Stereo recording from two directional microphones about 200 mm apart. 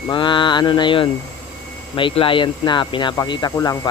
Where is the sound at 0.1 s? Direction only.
25° left (ahead or behind).